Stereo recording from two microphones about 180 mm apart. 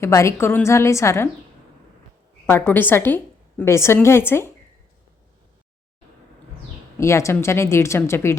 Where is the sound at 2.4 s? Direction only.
10° left (ahead or behind).